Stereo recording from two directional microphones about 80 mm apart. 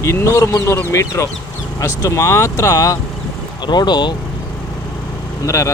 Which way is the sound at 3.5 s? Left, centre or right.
Left.